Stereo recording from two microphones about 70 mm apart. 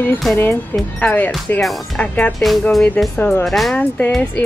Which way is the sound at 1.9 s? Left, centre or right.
Left.